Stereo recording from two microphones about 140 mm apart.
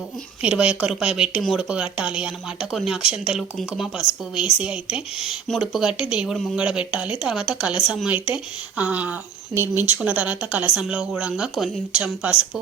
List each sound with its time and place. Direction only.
0.4 s speech: 10° right (ahead or behind)